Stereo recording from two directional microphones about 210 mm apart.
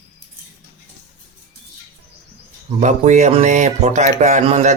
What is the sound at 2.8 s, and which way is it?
Speech, 35° right (ahead or behind).